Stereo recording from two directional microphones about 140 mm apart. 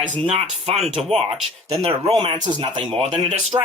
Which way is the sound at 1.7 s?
25° right (ahead or behind).